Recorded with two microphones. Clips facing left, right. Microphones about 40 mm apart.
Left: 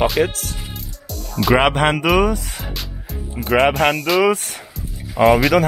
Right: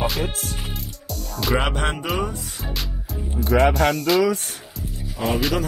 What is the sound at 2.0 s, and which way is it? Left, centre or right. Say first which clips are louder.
Speech: left 9 dB; left.